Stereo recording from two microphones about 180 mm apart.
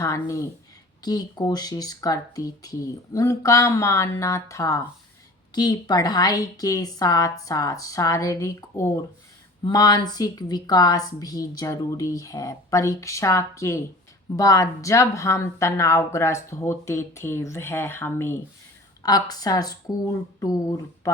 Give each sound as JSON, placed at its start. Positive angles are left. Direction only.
{"t": 0.0, "sound": "a woman's voice", "side_deg": 15}